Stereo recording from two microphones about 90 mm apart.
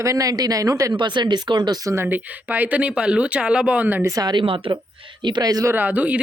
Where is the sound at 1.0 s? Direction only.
55° right (ahead or behind).